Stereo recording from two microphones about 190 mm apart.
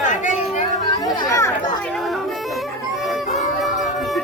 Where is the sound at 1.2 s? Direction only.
15° left (ahead or behind).